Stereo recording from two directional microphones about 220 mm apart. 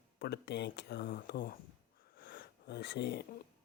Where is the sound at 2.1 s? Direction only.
50° left (ahead or behind).